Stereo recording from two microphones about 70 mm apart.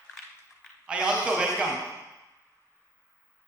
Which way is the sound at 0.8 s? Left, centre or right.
Centre.